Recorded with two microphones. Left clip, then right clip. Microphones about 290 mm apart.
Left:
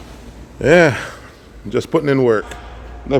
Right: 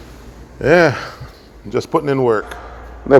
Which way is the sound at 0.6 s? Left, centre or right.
Centre.